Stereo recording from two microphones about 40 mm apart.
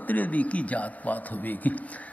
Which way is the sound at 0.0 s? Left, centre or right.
Left.